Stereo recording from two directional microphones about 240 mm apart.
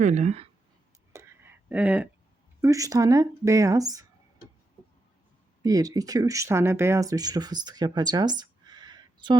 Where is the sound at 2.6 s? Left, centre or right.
Centre.